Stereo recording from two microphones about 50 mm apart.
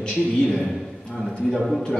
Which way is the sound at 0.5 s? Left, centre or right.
Centre.